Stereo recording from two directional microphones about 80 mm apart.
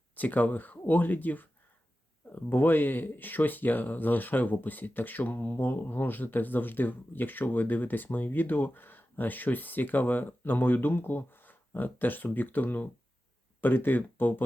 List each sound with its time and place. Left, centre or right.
0.2 s speech: left